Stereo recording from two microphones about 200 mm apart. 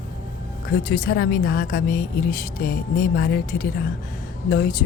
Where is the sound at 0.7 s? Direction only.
50° left (ahead or behind).